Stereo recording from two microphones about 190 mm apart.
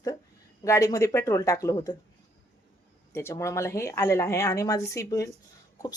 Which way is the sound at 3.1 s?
15° left (ahead or behind).